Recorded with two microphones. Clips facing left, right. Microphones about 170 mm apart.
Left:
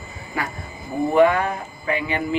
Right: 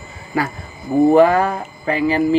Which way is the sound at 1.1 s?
35° right (ahead or behind).